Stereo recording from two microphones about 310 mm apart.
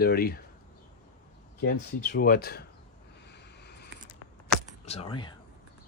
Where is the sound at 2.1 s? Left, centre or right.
Left.